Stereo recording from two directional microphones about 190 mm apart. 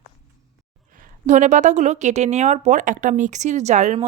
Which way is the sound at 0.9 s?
40° right (ahead or behind).